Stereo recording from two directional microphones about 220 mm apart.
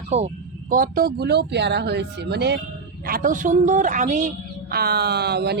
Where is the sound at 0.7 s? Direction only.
40° right (ahead or behind).